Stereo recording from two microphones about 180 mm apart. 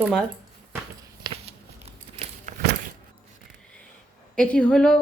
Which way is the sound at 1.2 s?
35° right (ahead or behind).